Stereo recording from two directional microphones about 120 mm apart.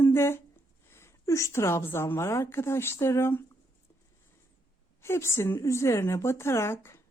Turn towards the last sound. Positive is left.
turn(degrees=20)  # may be behind; listen again after turning